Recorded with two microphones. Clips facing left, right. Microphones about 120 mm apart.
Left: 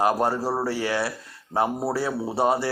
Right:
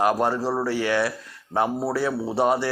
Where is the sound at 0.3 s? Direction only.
15° left (ahead or behind).